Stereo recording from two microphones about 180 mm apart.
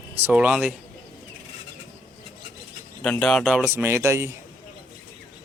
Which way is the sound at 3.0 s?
5° left (ahead or behind).